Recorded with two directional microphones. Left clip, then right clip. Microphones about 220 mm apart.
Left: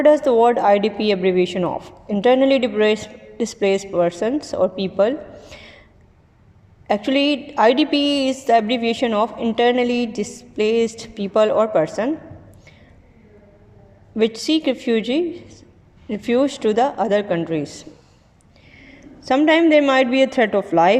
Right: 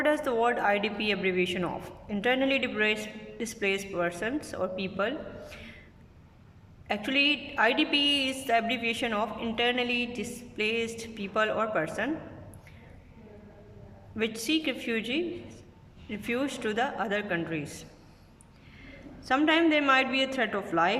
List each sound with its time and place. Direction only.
0.0 s a woman's voice: 20° left (ahead or behind)
6.8 s a woman's voice: 20° left (ahead or behind)
14.2 s a woman's voice: 20° left (ahead or behind)